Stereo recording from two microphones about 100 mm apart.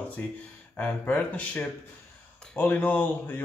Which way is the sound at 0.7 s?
15° left (ahead or behind).